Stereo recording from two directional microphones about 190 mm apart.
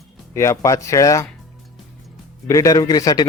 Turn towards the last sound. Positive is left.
turn(degrees=20)  # may be behind; listen again after turning